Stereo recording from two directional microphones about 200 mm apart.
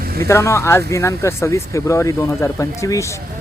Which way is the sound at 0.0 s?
50° right (ahead or behind).